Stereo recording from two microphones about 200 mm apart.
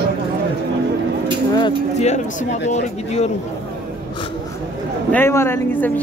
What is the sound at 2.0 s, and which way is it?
A man's voice, 35° left (ahead or behind).